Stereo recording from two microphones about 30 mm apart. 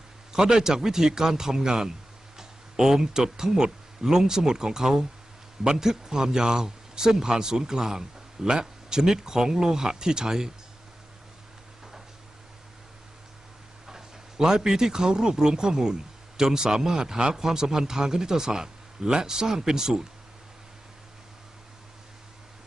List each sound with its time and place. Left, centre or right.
0.3 s speech: right
13.8 s a man's voice: centre